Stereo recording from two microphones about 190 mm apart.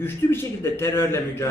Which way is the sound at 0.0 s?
10° left (ahead or behind).